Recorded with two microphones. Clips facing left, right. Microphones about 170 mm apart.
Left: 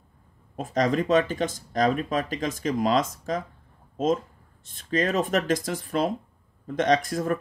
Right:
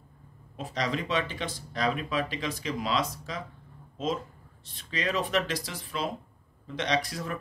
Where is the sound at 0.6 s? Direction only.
45° left (ahead or behind).